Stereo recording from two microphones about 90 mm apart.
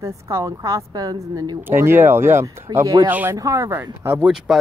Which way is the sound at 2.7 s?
50° right (ahead or behind).